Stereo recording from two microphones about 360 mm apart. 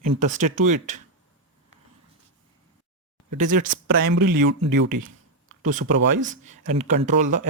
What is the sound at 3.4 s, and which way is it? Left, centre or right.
Speech, right.